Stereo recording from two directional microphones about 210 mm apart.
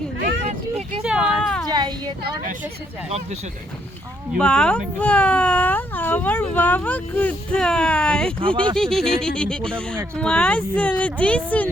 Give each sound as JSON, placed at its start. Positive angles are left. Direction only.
{"t": 0.4, "sound": "vehicle", "side_deg": -30}
{"t": 1.0, "sound": "speech", "side_deg": 0}
{"t": 1.7, "sound": "speech", "side_deg": -20}
{"t": 4.3, "sound": "speech", "side_deg": 5}
{"t": 8.4, "sound": "speech", "side_deg": -25}
{"t": 8.7, "sound": "speech", "side_deg": 0}